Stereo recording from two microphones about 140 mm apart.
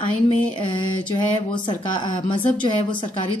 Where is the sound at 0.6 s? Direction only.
35° left (ahead or behind).